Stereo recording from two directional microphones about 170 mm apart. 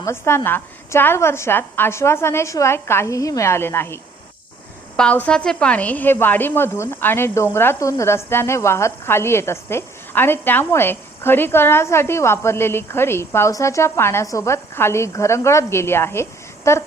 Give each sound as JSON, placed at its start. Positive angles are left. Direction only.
{"t": 0.0, "sound": "a woman's voice", "side_deg": 15}